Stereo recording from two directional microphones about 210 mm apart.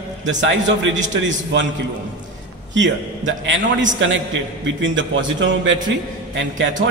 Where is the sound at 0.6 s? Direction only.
60° right (ahead or behind).